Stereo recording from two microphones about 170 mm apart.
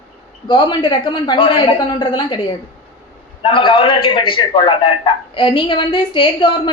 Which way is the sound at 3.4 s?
30° left (ahead or behind).